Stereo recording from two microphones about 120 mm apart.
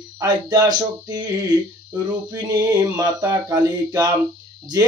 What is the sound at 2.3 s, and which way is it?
Speech, 30° right (ahead or behind).